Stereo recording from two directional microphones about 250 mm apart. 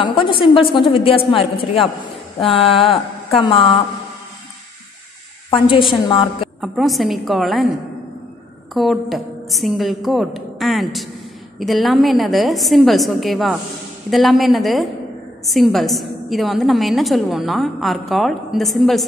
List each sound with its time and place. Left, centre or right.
0.0 s a woman's voice: centre
5.5 s a woman's voice: centre
6.6 s a woman's voice: centre
8.7 s a woman's voice: centre